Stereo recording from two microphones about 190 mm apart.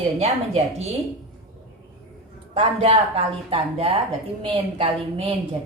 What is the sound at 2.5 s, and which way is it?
A woman's voice, 30° right (ahead or behind).